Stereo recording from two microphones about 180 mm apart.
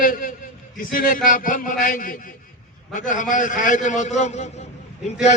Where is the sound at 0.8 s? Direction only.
50° left (ahead or behind).